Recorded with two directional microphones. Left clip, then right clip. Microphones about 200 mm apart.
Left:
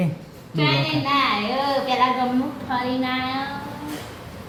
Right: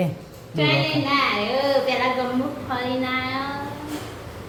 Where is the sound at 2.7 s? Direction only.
Centre (ahead or behind).